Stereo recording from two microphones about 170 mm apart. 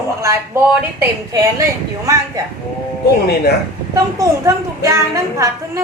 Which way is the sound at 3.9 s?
20° right (ahead or behind).